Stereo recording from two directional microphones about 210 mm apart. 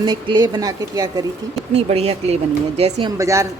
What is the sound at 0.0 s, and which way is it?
Speech, 20° right (ahead or behind).